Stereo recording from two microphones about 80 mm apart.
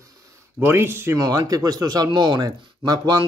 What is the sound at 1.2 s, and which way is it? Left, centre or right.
Speech, right.